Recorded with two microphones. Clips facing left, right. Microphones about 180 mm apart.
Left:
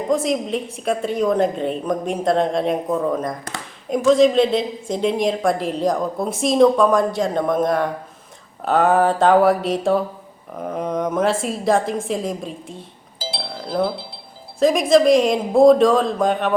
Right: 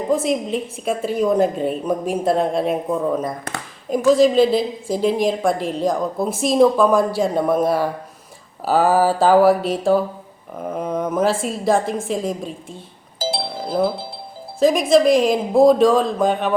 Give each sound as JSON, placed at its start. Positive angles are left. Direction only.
{"t": 0.1, "sound": "a woman's voice", "side_deg": 0}
{"t": 13.1, "sound": "chink", "side_deg": -45}
{"t": 13.8, "sound": "speech", "side_deg": -45}
{"t": 14.6, "sound": "a woman's voice", "side_deg": 0}